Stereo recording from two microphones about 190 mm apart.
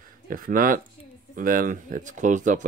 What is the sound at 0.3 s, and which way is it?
Speech, 45° right (ahead or behind).